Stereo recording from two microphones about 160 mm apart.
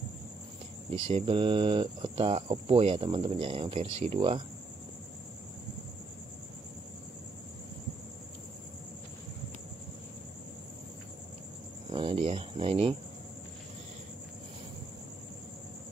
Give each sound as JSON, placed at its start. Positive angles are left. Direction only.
{"t": 0.8, "sound": "speech", "side_deg": -35}
{"t": 11.9, "sound": "speech", "side_deg": -35}